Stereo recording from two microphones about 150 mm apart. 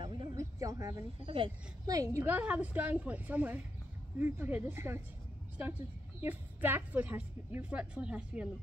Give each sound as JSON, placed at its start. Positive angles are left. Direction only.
{"t": 0.0, "sound": "a sound", "side_deg": -35}
{"t": 0.4, "sound": "speech", "side_deg": -20}
{"t": 1.2, "sound": "speech", "side_deg": -35}
{"t": 1.9, "sound": "a woman's voice", "side_deg": -20}
{"t": 6.2, "sound": "a woman's voice", "side_deg": -10}